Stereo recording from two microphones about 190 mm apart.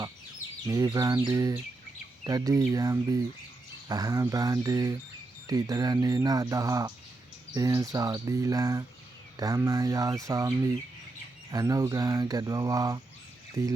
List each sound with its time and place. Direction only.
0.7 s cricket: 15° right (ahead or behind)
2.2 s speech: 20° right (ahead or behind)
7.5 s cricket: 20° right (ahead or behind)
9.4 s speech: 20° right (ahead or behind)
11.5 s speech: 20° right (ahead or behind)
13.6 s cricket: 15° right (ahead or behind)